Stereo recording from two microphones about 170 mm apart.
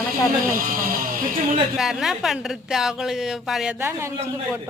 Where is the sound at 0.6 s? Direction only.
55° right (ahead or behind).